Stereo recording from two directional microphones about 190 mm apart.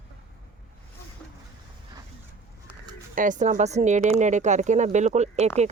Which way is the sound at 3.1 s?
40° right (ahead or behind).